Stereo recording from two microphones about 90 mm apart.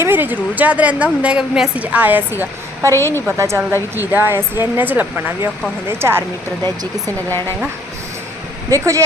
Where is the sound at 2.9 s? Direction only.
25° left (ahead or behind).